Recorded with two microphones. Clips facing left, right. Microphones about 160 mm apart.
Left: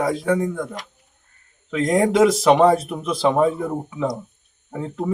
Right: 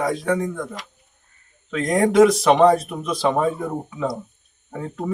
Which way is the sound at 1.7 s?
25° left (ahead or behind).